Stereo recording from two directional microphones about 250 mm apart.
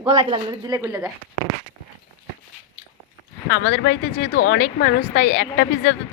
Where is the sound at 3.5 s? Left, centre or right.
Left.